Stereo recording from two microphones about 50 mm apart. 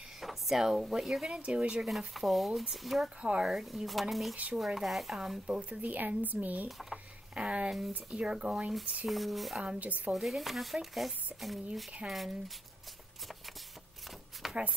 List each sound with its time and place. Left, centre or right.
0.2 s speech: centre
1.3 s speech: right
1.9 s speech: centre
3.2 s speech: centre
3.4 s speech: centre
5.5 s speech: right
7.3 s speech: right
9.0 s speech: centre
9.6 s speech: right
9.8 s speech: right
10.1 s speech: centre
14.4 s a sound: centre